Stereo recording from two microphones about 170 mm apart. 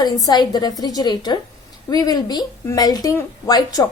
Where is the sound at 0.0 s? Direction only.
25° left (ahead or behind).